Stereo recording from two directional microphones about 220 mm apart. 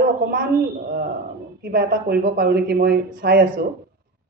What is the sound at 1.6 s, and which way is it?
Speech, 45° right (ahead or behind).